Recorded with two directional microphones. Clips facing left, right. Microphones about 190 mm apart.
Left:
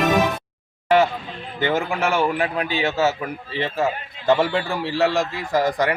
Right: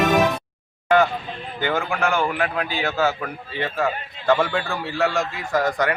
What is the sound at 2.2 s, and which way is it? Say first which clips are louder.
A man's voice: left 2 dB; 25° left (ahead or behind).